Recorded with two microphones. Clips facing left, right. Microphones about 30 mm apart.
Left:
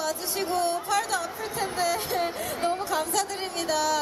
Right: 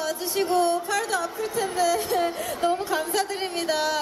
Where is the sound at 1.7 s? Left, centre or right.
Left.